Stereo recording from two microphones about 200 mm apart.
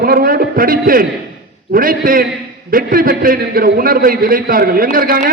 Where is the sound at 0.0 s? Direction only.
45° right (ahead or behind).